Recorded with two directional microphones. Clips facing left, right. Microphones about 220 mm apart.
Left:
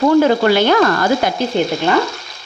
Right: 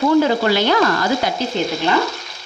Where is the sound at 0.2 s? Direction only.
55° left (ahead or behind).